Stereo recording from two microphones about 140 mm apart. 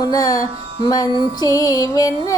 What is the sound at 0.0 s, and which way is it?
Speech, 25° left (ahead or behind).